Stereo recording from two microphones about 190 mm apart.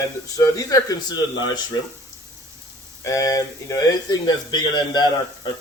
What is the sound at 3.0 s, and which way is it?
Speech, 15° left (ahead or behind).